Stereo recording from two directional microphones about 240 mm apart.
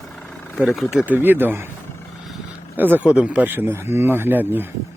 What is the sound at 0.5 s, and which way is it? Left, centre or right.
Speech, centre.